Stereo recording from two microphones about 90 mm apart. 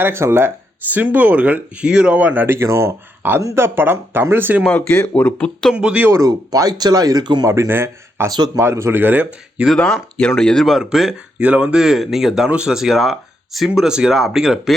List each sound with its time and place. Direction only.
0.0 s speech: 25° right (ahead or behind)
5.0 s speech: 15° left (ahead or behind)
5.7 s speech: 15° right (ahead or behind)
6.1 s speech: 40° right (ahead or behind)
7.4 s speech: 35° right (ahead or behind)
9.7 s speech: 10° left (ahead or behind)
11.3 s speech: 15° right (ahead or behind)